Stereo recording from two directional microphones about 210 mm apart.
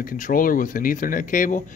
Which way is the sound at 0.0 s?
40° left (ahead or behind).